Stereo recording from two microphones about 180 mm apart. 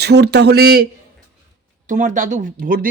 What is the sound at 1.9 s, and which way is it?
Speech, 45° right (ahead or behind).